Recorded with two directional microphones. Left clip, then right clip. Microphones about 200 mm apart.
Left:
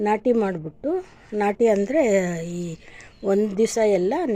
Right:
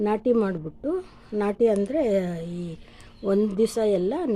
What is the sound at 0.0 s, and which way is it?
A woman's voice, 5° left (ahead or behind).